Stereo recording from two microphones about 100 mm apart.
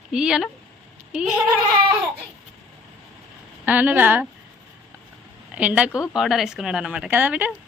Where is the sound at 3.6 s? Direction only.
15° right (ahead or behind).